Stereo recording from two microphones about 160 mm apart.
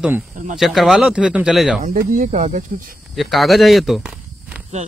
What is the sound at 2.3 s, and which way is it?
Speech, 45° right (ahead or behind).